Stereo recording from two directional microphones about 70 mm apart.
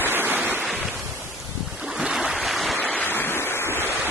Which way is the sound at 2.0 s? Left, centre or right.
Centre.